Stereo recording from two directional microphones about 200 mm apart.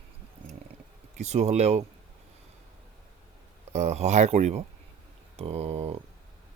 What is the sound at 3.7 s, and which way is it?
Speech, 35° right (ahead or behind).